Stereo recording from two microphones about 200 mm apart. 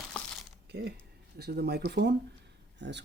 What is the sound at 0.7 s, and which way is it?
Speech, 55° right (ahead or behind).